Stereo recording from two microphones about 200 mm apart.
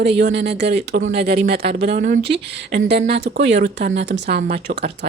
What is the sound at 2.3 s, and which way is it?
Speech, 55° right (ahead or behind).